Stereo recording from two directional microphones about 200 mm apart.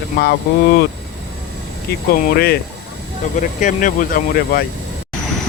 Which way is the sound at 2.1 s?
45° left (ahead or behind).